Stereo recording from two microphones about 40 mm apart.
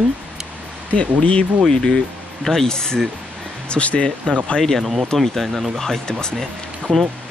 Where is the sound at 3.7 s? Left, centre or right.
Left.